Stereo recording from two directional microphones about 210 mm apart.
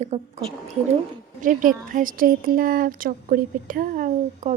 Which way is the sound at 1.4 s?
40° right (ahead or behind).